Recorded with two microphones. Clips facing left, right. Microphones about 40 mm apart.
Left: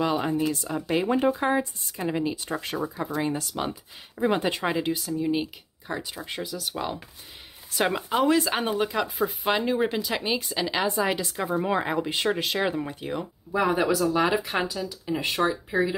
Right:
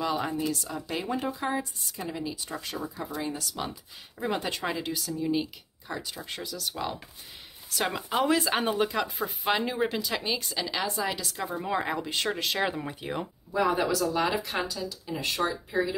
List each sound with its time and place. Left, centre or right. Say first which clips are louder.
0.0 s speech: left 4 dB; centre
8.1 s speech: left 1 dB; centre
10.0 s speech: left 3 dB; centre
12.5 s speech: left 3 dB; centre
13.5 s speech: left 3 dB; centre